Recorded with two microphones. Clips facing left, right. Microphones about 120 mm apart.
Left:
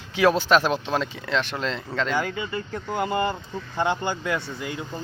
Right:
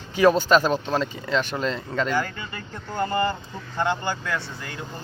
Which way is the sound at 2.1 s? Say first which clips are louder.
Left 1 dB; 10° left (ahead or behind).